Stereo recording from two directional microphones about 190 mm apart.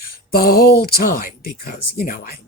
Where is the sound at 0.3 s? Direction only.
50° left (ahead or behind).